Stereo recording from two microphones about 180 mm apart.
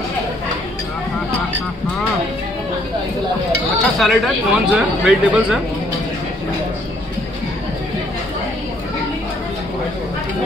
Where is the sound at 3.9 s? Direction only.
Centre (ahead or behind).